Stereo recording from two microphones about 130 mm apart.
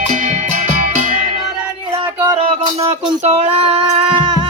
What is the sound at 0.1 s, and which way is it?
Music, 80° right.